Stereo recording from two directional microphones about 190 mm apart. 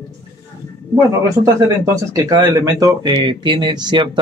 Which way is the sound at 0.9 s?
15° right (ahead or behind).